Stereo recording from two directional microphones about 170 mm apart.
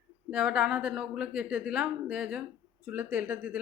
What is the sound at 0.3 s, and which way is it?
A woman's voice, 5° right (ahead or behind).